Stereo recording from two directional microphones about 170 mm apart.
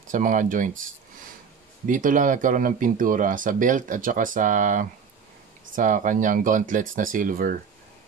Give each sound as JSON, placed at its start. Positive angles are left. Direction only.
{"t": 0.1, "sound": "speech", "side_deg": -50}
{"t": 1.9, "sound": "speech", "side_deg": -50}